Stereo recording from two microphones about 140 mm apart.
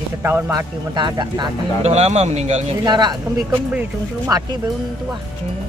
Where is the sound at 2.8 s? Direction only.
30° right (ahead or behind).